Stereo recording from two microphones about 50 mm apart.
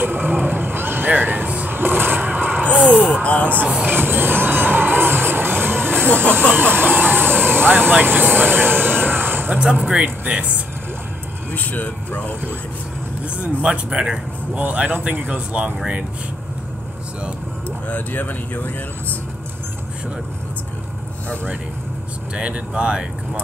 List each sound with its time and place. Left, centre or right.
0.0 s vehicle: right
2.6 s vehicle: left
3.8 s music: right
5.9 s speech: left
6.5 s a sound: right
7.6 s speech: right
9.1 s a sound: right
9.6 s speech: centre
11.5 s speech: left
13.4 s speech: right
14.6 s speech: right
17.6 s speech: left
22.3 s speech: right